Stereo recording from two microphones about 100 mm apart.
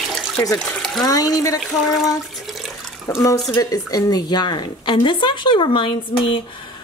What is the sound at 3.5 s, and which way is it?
Speech, 40° left (ahead or behind).